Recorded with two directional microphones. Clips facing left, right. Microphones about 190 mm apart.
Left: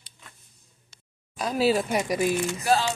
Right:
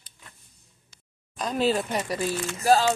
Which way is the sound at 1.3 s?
5° left (ahead or behind).